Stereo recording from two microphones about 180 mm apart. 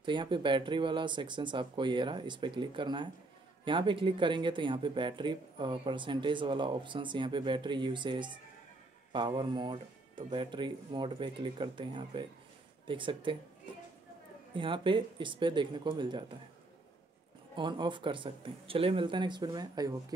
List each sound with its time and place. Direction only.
0.0 s speech: 25° right (ahead or behind)
14.5 s speech: 30° right (ahead or behind)
17.6 s speech: 25° right (ahead or behind)